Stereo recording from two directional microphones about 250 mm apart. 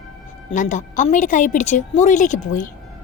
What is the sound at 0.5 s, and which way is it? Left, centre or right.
A woman's voice, left.